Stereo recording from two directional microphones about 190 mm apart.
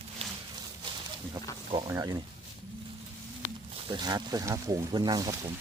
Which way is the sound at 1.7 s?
20° right (ahead or behind).